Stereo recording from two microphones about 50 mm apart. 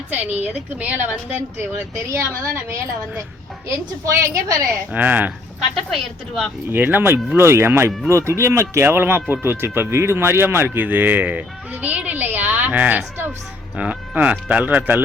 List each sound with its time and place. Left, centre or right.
0.1 s speech: right
2.0 s speech: right
4.0 s a woman's voice: right
4.9 s speech: right
5.5 s a woman's voice: centre
6.7 s speech: right
8.8 s speech: right